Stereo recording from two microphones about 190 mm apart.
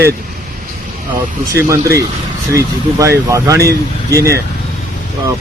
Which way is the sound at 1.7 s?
15° right (ahead or behind).